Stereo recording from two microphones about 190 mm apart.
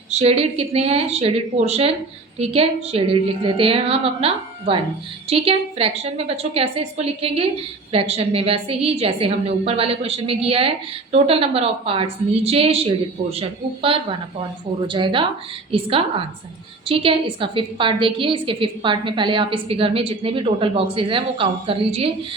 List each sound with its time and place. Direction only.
0.1 s a woman's voice: 30° right (ahead or behind)